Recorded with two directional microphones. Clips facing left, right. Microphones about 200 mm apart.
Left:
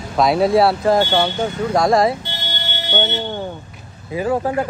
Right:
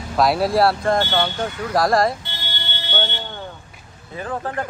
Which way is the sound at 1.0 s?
15° left (ahead or behind).